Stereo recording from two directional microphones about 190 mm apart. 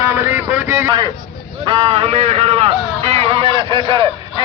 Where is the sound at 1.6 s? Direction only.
30° right (ahead or behind).